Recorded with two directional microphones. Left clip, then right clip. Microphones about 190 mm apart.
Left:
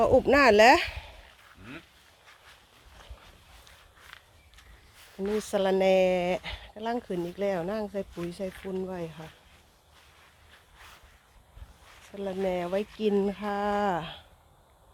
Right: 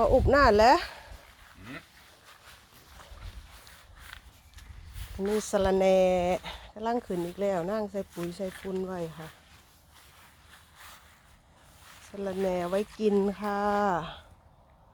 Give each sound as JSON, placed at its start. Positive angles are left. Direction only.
{"t": 0.0, "sound": "speech", "side_deg": 25}
{"t": 4.0, "sound": "walk", "side_deg": -50}
{"t": 5.4, "sound": "speech", "side_deg": -10}
{"t": 8.2, "sound": "speech", "side_deg": -45}
{"t": 8.7, "sound": "speech", "side_deg": -5}
{"t": 10.8, "sound": "a sound", "side_deg": -50}
{"t": 12.1, "sound": "speech", "side_deg": -10}